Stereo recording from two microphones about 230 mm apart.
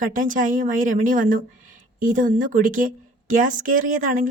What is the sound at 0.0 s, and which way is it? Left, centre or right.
A woman's voice, right.